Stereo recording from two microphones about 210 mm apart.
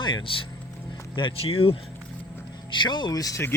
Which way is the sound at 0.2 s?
25° left (ahead or behind).